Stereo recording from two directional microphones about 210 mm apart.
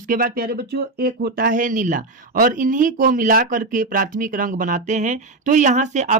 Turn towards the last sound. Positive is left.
turn(degrees=-35)  # may be behind; listen again after turning